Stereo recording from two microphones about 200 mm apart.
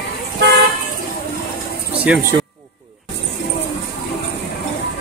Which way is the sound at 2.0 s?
5° right (ahead or behind).